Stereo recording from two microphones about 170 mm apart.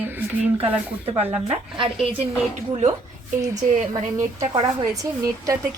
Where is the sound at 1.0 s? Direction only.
35° right (ahead or behind).